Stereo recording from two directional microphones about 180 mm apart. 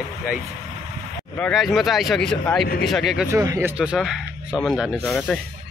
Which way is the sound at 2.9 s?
Centre (ahead or behind).